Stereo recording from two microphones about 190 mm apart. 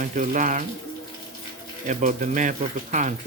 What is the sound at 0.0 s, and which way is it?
Speech, 40° right (ahead or behind).